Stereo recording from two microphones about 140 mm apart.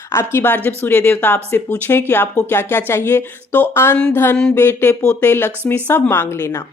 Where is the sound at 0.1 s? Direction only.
20° left (ahead or behind).